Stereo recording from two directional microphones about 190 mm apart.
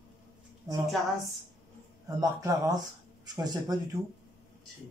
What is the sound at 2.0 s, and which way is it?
A man's voice, 20° right (ahead or behind).